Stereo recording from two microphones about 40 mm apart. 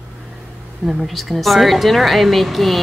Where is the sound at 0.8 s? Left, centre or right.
Centre.